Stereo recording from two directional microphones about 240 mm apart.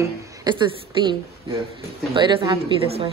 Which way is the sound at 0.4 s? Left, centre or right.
Centre.